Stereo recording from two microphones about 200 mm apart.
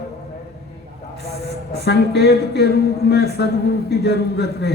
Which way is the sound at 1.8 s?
55° left (ahead or behind).